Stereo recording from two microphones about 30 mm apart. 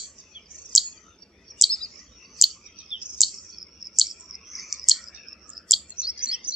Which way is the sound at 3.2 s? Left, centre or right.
Centre.